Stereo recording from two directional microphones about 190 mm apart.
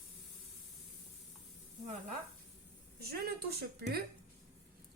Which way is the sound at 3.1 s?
55° right (ahead or behind).